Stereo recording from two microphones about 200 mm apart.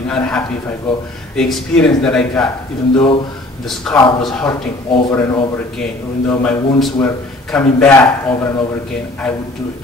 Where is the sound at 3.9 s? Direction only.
5° left (ahead or behind).